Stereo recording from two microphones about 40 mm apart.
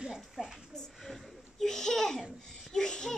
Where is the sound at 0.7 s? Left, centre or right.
Centre.